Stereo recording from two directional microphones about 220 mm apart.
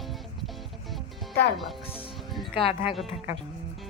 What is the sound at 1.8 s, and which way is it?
Speech, 25° left (ahead or behind).